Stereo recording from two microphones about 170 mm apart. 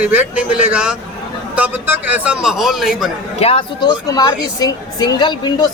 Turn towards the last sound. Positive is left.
turn(degrees=25)  # may be behind; listen again after turning